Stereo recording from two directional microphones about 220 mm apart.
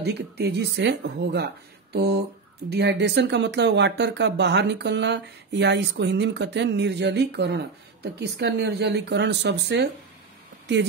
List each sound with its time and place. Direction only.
0.0 s speech: 50° right (ahead or behind)